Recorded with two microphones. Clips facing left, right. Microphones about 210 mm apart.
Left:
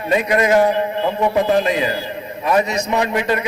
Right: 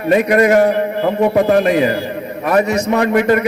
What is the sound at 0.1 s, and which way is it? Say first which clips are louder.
A man's voice: right 4 dB; 45° right (ahead or behind).